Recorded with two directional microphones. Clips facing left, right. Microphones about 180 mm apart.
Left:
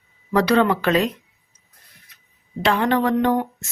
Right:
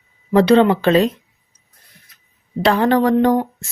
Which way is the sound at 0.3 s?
25° right (ahead or behind).